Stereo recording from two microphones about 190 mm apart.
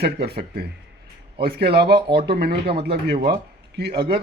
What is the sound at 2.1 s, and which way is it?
Speech, 55° right (ahead or behind).